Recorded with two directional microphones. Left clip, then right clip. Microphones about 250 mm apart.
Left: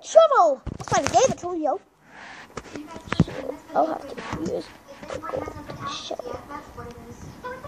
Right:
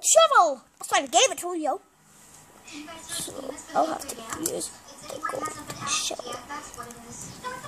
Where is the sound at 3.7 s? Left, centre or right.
Centre.